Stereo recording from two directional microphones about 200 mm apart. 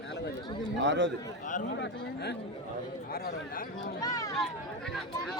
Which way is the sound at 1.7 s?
60° left (ahead or behind).